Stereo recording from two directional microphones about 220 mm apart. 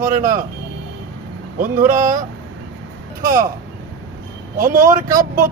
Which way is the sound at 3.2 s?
40° right (ahead or behind).